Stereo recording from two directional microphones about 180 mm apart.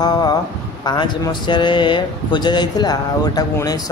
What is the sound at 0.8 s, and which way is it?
Speech, 25° left (ahead or behind).